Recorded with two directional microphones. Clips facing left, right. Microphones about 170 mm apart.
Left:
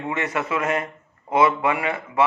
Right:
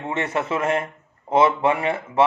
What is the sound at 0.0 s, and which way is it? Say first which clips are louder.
A man's voice: right 1 dB; 30° right (ahead or behind).